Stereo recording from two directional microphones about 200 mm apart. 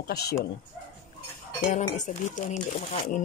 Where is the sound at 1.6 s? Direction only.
40° left (ahead or behind).